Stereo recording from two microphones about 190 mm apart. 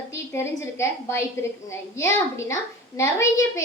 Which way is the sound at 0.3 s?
15° left (ahead or behind).